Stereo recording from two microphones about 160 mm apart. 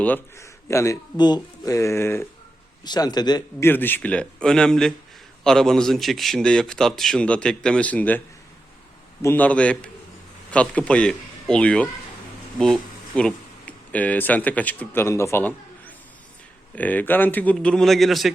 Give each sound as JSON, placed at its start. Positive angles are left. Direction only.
{"t": 0.0, "sound": "speech", "side_deg": 15}
{"t": 2.8, "sound": "a man's voice", "side_deg": 25}
{"t": 3.7, "sound": "a man's voice", "side_deg": 15}
{"t": 9.2, "sound": "speech", "side_deg": 10}
{"t": 16.7, "sound": "speech", "side_deg": 10}